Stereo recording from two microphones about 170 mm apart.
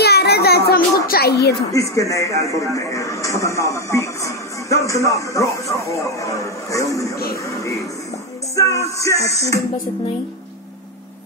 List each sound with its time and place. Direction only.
0.0 s a sound: 70° left (ahead or behind)
1.0 s speech: 65° left (ahead or behind)
1.7 s a man's voice: 20° left (ahead or behind)
8.5 s a man's voice: 20° left (ahead or behind)